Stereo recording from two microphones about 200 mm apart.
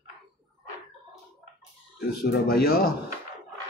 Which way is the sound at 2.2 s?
50° left (ahead or behind).